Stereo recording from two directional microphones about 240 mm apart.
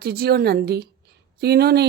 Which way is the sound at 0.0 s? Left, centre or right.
Right.